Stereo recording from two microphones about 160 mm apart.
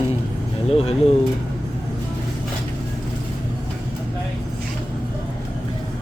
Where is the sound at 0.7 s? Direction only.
40° left (ahead or behind).